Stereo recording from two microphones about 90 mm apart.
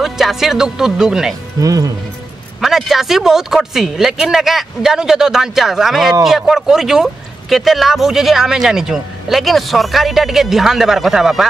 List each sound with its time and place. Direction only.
0.0 s speech: 5° right (ahead or behind)
1.6 s speech: 40° right (ahead or behind)
2.6 s speech: 5° right (ahead or behind)